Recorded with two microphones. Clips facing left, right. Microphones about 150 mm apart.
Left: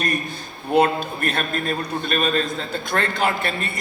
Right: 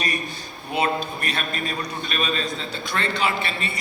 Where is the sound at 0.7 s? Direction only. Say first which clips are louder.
Left 6 dB; 50° left (ahead or behind).